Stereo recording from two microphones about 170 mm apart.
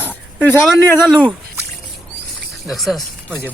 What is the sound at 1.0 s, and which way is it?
Speech, centre (ahead or behind).